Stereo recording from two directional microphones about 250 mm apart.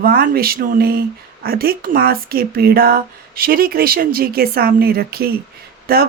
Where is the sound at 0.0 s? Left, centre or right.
Right.